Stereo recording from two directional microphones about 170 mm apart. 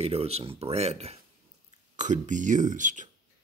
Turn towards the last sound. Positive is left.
turn(degrees=-50)  # may be behind; listen again after turning